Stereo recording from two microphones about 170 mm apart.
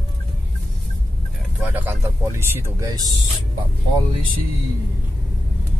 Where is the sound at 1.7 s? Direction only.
10° right (ahead or behind).